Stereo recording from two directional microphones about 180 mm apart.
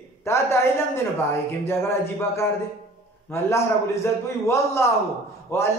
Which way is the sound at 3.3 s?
15° left (ahead or behind).